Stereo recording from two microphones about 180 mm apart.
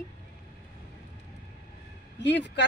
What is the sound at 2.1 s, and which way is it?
Speech, 75° left (ahead or behind).